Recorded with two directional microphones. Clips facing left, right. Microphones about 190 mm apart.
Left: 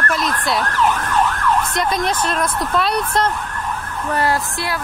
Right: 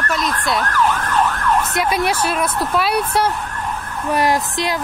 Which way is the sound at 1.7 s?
10° right (ahead or behind).